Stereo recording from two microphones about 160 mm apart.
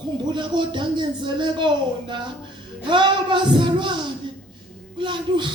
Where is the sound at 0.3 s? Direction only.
30° right (ahead or behind).